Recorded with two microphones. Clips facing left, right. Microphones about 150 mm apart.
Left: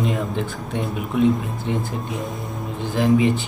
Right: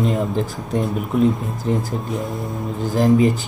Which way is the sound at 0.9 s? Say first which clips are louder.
Left 1 dB; 40° right (ahead or behind).